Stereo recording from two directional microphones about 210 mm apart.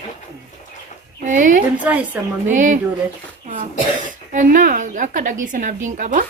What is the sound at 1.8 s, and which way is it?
Speech, 5° right (ahead or behind).